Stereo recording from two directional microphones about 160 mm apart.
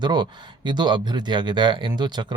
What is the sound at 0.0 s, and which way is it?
Speech, 30° right (ahead or behind).